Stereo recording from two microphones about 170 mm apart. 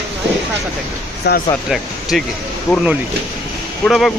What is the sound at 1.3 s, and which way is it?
Speech, 75° left (ahead or behind).